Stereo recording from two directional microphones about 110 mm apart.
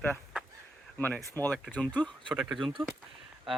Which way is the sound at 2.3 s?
Centre (ahead or behind).